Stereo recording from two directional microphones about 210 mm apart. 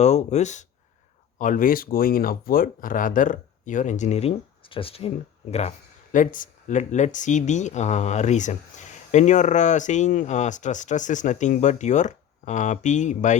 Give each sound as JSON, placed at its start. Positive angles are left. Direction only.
{"t": 0.0, "sound": "speech", "side_deg": 35}